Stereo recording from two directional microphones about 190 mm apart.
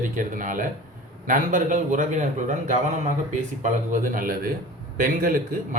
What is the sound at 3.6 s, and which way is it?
Speech, 45° right (ahead or behind).